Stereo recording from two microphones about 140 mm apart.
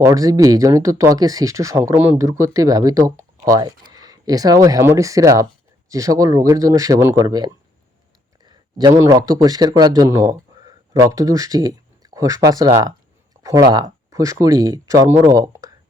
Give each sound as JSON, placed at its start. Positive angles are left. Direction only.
{"t": 0.0, "sound": "speech", "side_deg": -25}